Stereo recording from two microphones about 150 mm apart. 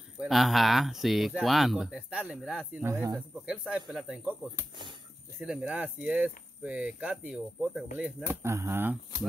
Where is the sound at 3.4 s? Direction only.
5° right (ahead or behind).